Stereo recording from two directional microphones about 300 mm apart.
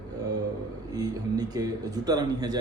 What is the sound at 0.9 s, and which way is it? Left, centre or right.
A man's voice, centre.